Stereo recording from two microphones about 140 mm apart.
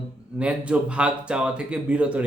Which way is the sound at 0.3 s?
10° right (ahead or behind).